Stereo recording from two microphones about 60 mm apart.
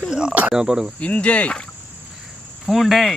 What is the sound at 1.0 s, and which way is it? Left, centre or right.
Speech, left.